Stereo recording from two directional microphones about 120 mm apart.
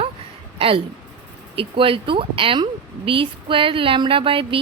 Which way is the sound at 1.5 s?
50° right (ahead or behind).